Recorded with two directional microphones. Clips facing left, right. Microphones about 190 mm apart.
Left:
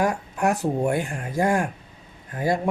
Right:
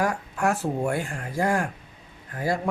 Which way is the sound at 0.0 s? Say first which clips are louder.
Left 2 dB; 20° left (ahead or behind).